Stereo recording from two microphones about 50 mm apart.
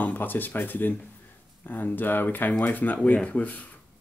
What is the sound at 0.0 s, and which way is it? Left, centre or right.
Speech, left.